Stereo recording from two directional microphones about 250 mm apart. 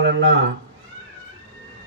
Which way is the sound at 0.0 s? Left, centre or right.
Right.